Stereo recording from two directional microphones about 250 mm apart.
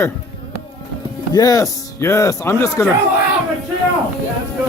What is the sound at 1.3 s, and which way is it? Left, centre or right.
Speech, centre.